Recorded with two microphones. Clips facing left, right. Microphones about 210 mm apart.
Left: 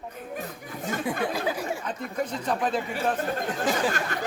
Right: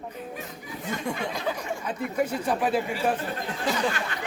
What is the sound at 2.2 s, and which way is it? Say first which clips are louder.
Speech: right 2 dB; 10° right (ahead or behind).